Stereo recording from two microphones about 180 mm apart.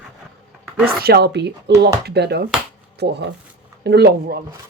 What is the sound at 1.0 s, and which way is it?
Speech, 60° right (ahead or behind).